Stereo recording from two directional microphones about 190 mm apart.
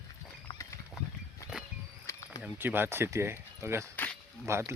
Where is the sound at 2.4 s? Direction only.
10° right (ahead or behind).